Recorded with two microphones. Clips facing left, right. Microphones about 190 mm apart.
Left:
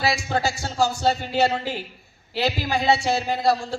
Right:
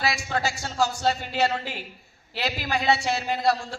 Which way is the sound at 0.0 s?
30° left (ahead or behind).